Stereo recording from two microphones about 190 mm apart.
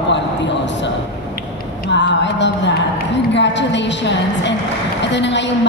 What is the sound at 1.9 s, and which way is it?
A woman's voice, 70° left (ahead or behind).